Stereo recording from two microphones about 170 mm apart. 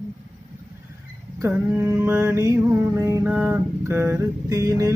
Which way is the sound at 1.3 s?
15° right (ahead or behind).